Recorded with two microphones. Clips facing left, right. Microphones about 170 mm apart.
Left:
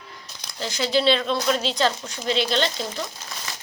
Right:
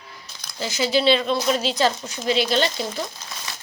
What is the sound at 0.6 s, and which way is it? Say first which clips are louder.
A woman's voice: right 1 dB; 5° right (ahead or behind).